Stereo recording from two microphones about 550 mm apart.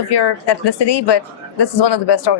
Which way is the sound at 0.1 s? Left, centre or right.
Left.